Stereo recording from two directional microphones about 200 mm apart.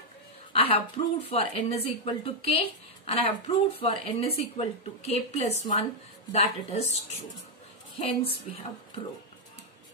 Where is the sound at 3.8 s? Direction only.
30° left (ahead or behind).